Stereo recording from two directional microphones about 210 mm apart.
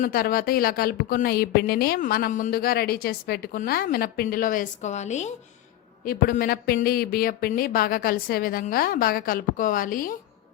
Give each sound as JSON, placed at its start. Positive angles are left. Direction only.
{"t": 0.0, "sound": "a woman's voice", "side_deg": 45}